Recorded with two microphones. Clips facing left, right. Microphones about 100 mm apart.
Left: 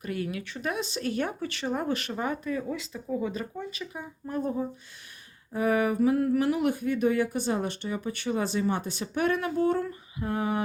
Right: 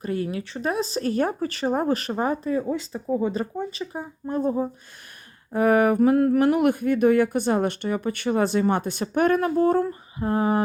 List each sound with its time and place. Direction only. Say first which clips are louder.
0.0 s speech: right 5 dB; 30° right (ahead or behind)
5.5 s speech: right 7 dB; 60° right (ahead or behind); by 10.6 s 35° right (ahead or behind)